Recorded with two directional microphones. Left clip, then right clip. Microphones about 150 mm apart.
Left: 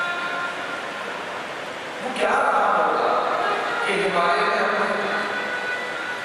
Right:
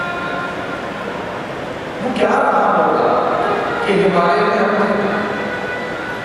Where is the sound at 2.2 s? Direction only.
25° right (ahead or behind).